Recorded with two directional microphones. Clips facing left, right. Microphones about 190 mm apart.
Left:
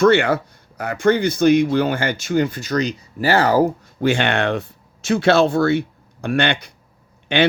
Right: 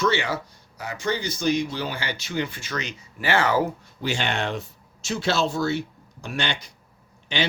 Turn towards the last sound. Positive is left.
turn(degrees=60)  # may be behind; listen again after turning